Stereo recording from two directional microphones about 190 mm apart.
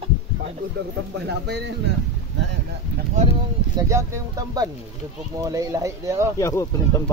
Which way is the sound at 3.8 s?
15° right (ahead or behind).